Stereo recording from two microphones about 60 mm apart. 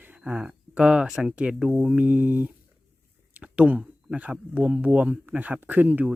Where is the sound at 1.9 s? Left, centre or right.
Right.